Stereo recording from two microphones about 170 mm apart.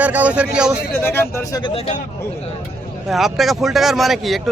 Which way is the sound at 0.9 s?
15° left (ahead or behind).